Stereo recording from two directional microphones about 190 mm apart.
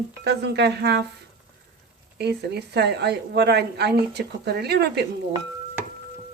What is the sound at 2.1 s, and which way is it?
A woman's voice, 60° right (ahead or behind).